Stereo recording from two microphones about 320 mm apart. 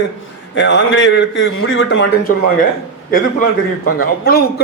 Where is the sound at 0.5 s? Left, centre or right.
Left.